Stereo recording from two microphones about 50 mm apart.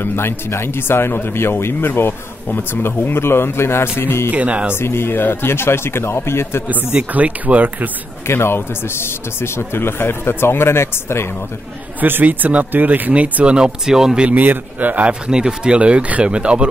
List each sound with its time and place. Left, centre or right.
0.0 s speech: left
4.3 s speech: right
4.7 s a man's voice: left
6.7 s speech: right
8.3 s a man's voice: left
12.0 s speech: right
13.1 s speech: right
13.8 s speech: centre
14.3 s speech: right
15.0 s speech: centre